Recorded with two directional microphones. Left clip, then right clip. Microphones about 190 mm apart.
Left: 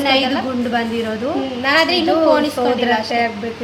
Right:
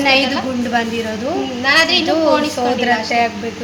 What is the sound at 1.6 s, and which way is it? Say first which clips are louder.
Speech: right 2 dB; 15° left (ahead or behind).